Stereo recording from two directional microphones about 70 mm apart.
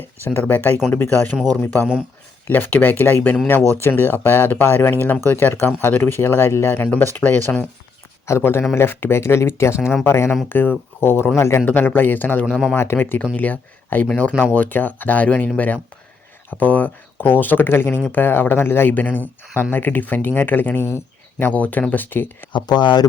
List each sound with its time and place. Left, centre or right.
0.3 s speech: left
11.6 s speech: left
22.5 s speech: left